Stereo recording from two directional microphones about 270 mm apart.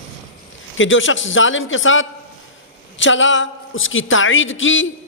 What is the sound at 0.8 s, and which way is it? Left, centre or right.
A man's voice, left.